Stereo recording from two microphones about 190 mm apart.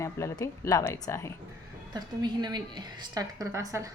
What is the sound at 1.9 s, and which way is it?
A woman's voice, 20° right (ahead or behind).